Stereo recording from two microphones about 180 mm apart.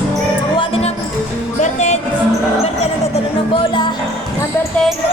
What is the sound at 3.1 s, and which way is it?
Music, 30° left (ahead or behind).